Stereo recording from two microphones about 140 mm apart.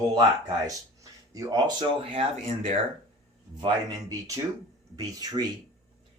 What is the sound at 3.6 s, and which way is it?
Speech, 30° right (ahead or behind).